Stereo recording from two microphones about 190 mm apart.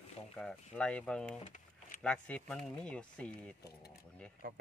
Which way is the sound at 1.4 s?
45° left (ahead or behind).